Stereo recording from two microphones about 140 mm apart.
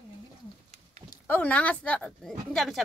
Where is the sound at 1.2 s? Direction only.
10° left (ahead or behind).